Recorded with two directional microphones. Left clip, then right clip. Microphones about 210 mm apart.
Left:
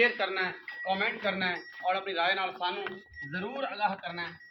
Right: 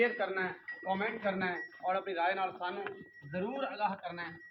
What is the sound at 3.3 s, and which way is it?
Speech, 15° left (ahead or behind).